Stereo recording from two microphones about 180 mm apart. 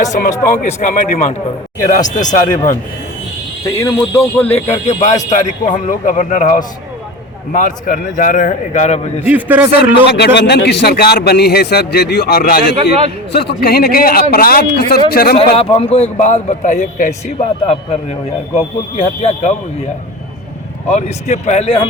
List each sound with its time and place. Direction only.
0.0 s a man's voice: 40° left (ahead or behind)
3.8 s speech: 10° left (ahead or behind)
4.9 s a man's voice: 40° left (ahead or behind)
9.2 s a man's voice: 10° right (ahead or behind)
10.1 s a man's voice: 70° left (ahead or behind)
15.5 s a man's voice: 35° left (ahead or behind)
18.5 s a man's voice: 35° left (ahead or behind)
20.8 s a man's voice: 40° left (ahead or behind)